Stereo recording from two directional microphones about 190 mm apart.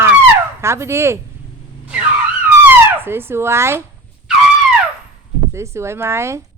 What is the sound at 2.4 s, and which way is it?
Dog, 10° right (ahead or behind).